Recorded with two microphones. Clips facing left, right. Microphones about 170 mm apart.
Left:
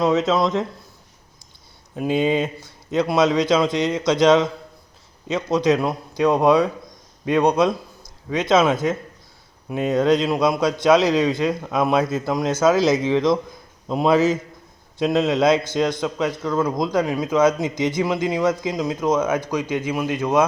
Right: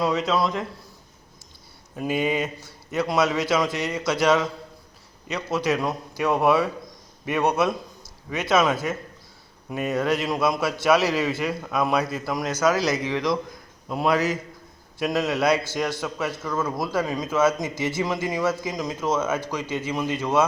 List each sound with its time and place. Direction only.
0.3 s a man's voice: 20° left (ahead or behind)
2.0 s a man's voice: 25° left (ahead or behind)